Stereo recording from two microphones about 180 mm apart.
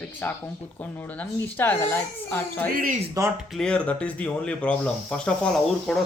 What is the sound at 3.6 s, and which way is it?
A woman's voice, 5° left (ahead or behind).